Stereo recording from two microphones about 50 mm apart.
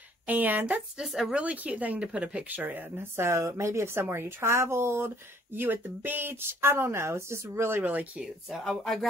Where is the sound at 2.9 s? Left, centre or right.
Right.